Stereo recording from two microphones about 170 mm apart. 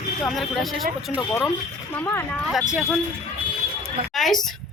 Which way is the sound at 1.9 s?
10° left (ahead or behind).